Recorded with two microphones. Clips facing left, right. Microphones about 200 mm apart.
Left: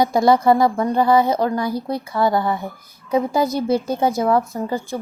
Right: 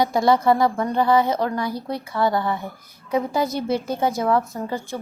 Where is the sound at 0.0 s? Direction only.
40° left (ahead or behind).